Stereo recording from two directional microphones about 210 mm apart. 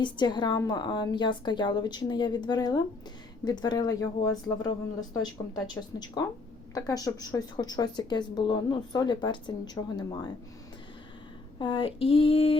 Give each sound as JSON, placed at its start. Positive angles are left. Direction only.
{"t": 0.0, "sound": "speech", "side_deg": 20}
{"t": 11.6, "sound": "speech", "side_deg": 25}